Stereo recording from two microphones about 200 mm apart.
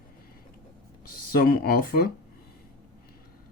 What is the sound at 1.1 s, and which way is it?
Speech, 45° left (ahead or behind).